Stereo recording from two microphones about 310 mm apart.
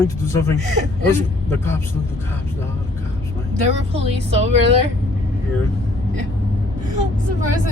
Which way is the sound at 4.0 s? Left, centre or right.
Centre.